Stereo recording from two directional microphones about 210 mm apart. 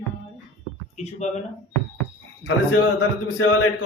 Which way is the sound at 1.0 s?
35° left (ahead or behind).